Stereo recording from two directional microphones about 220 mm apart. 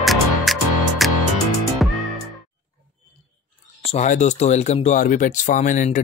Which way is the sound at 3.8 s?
30° left (ahead or behind).